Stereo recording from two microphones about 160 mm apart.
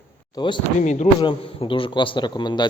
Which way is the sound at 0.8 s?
50° left (ahead or behind).